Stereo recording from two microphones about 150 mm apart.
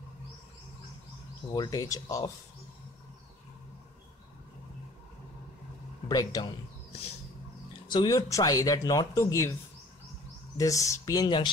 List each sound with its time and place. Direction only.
1.5 s speech: 25° left (ahead or behind)
6.0 s speech: 25° left (ahead or behind)
7.9 s speech: 30° left (ahead or behind)
10.6 s speech: 20° left (ahead or behind)